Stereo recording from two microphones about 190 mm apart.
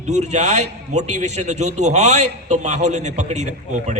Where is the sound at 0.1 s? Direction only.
35° right (ahead or behind).